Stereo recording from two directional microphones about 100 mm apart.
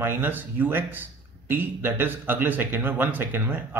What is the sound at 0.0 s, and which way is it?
A man's voice, 20° right (ahead or behind).